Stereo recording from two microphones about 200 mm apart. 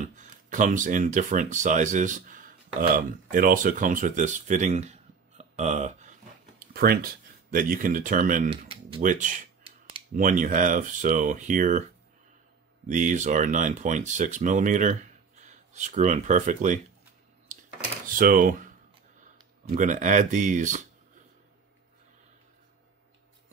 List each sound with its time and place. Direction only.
0.0 s speech: 40° right (ahead or behind)
6.7 s speech: 50° right (ahead or behind)
8.5 s speech: 25° right (ahead or behind)
9.0 s speech: 40° right (ahead or behind)
9.6 s typing: 25° right (ahead or behind)
10.1 s speech: 40° right (ahead or behind)
12.8 s speech: 40° right (ahead or behind)
18.0 s speech: 45° right (ahead or behind)
19.7 s speech: 40° right (ahead or behind)